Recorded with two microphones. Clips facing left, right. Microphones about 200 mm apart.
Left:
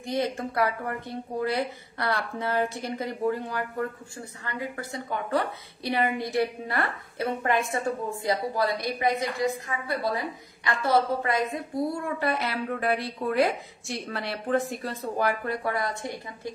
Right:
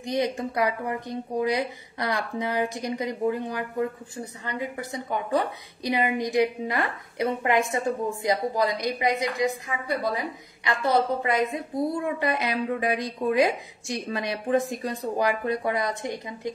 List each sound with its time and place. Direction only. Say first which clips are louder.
0.0 s speech: right 2 dB; 15° right (ahead or behind)